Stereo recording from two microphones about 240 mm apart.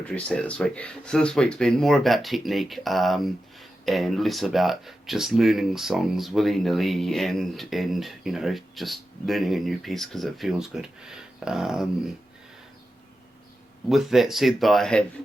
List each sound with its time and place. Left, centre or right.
0.0 s speech: centre
13.9 s speech: centre